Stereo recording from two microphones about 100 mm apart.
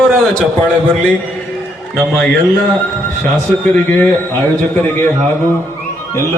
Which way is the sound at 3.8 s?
20° left (ahead or behind).